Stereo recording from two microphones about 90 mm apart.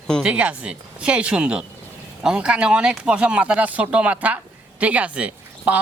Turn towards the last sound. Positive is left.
turn(degrees=-15)  # may be behind; listen again after turning